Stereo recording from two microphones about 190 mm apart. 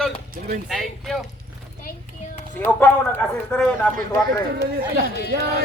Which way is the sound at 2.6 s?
10° left (ahead or behind).